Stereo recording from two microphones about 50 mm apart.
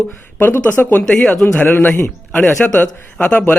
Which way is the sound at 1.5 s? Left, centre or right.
Left.